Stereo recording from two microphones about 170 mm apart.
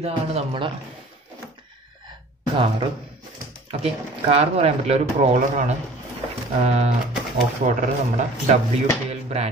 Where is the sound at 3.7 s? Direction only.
35° right (ahead or behind).